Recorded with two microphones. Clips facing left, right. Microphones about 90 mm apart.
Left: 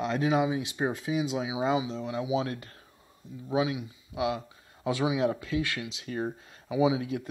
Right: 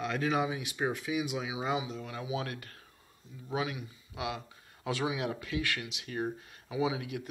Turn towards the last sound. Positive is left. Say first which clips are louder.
# left 7 dB
turn(degrees=30)  # may be behind; listen again after turning